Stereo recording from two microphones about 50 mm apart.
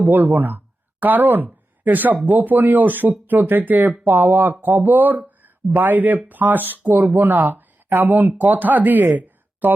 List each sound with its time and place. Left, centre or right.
0.0 s speech: right